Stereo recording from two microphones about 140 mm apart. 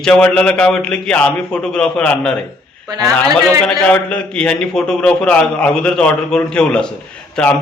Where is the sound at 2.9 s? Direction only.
25° right (ahead or behind).